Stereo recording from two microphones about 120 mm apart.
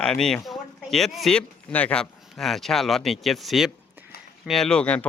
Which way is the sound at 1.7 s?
10° left (ahead or behind).